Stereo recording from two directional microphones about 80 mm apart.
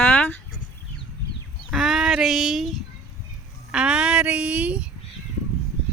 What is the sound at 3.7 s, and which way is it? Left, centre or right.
Speech, centre.